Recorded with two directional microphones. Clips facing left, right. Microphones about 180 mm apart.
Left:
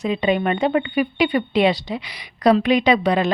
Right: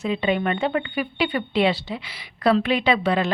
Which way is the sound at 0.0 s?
15° left (ahead or behind).